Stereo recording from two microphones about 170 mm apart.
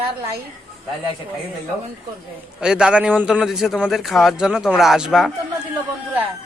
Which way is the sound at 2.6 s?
5° right (ahead or behind).